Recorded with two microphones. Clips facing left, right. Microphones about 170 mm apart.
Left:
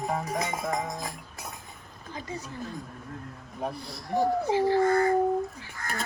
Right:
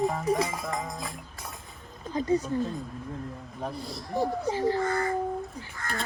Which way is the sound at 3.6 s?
Centre (ahead or behind).